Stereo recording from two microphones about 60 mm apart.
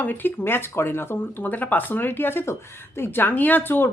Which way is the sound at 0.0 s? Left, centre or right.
Left.